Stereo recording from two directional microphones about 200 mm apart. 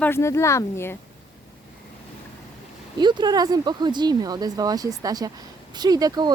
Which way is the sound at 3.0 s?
20° right (ahead or behind).